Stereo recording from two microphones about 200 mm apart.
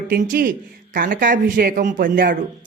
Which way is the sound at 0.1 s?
45° right (ahead or behind).